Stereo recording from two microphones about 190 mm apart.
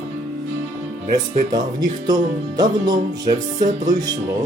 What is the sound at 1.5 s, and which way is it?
Music, 20° right (ahead or behind).